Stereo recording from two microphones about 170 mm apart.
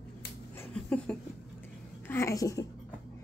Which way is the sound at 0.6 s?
10° left (ahead or behind).